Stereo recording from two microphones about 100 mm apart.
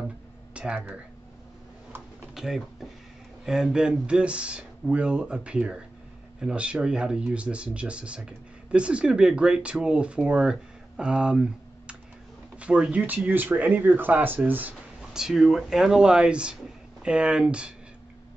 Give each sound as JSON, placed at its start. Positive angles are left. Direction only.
{"t": 0.6, "sound": "speech", "side_deg": -15}
{"t": 2.3, "sound": "speech", "side_deg": -5}
{"t": 12.5, "sound": "speech", "side_deg": -10}
{"t": 15.0, "sound": "speech", "side_deg": -5}